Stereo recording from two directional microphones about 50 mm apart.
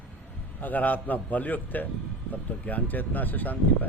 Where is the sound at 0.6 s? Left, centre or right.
Left.